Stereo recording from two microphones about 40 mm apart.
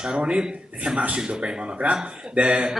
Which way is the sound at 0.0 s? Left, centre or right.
Right.